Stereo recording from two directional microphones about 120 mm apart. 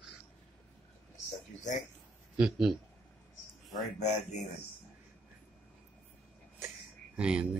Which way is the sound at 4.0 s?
70° left (ahead or behind).